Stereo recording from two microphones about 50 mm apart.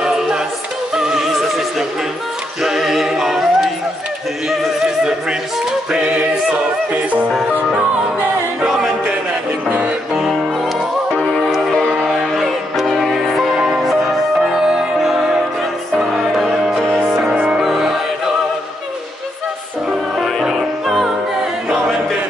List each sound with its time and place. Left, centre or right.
0.0 s music: centre
4.5 s music: centre
5.9 s a capella: right
8.6 s music: centre
9.7 s music: right
11.3 s music: centre
20.4 s music: centre